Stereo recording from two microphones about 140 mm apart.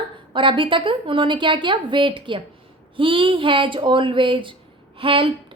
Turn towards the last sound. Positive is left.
turn(degrees=-40)  # may be behind; listen again after turning